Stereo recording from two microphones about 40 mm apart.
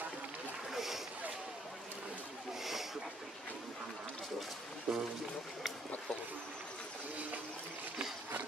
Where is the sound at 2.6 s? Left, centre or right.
Centre.